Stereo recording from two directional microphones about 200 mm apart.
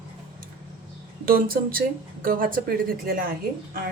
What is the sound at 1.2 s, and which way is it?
Speech, 45° right (ahead or behind).